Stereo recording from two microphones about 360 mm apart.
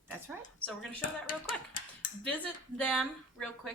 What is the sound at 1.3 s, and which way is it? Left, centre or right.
Speech, left.